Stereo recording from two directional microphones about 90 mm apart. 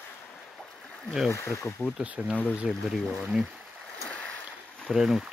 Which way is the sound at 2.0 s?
15° right (ahead or behind).